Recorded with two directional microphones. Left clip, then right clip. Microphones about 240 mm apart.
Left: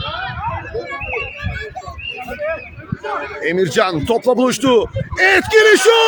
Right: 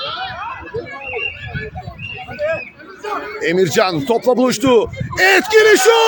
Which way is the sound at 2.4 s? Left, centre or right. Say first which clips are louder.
Right 3 dB; right.